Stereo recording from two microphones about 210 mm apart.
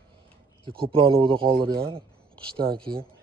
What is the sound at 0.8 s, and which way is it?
Speech, 25° right (ahead or behind).